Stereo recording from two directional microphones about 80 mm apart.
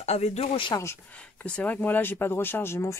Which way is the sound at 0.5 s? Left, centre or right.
Left.